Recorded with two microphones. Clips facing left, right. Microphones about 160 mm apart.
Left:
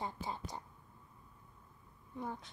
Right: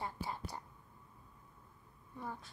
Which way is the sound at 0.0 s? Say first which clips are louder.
Left 1 dB; 20° left (ahead or behind).